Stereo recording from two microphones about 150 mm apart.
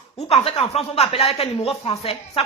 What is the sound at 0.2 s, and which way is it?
Speech, 45° left (ahead or behind).